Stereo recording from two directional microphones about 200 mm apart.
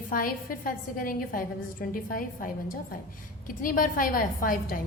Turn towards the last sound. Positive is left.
turn(degrees=45)  # may be behind; listen again after turning